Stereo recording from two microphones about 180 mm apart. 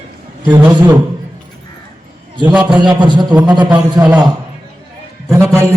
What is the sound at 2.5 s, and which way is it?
Speech, 5° right (ahead or behind).